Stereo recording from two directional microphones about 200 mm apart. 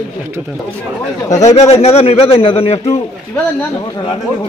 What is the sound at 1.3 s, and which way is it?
A man's voice, 35° left (ahead or behind).